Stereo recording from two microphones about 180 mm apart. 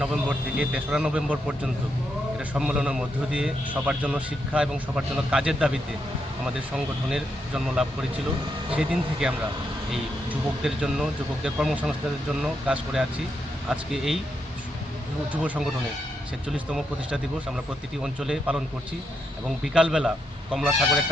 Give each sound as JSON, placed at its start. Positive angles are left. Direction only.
{"t": 0.0, "sound": "a man's voice", "side_deg": -5}
{"t": 10.6, "sound": "a man's voice", "side_deg": -5}
{"t": 15.3, "sound": "a man's voice", "side_deg": -10}